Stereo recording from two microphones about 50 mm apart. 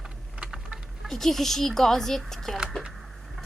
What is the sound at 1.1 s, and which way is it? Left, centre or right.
Speech, centre.